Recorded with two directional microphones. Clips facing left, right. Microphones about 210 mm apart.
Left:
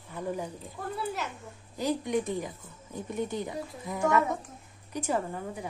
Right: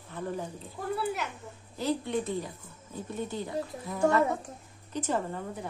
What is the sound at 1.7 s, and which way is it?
A woman's voice, 15° left (ahead or behind).